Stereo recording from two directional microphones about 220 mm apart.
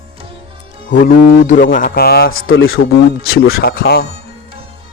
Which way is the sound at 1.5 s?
35° left (ahead or behind).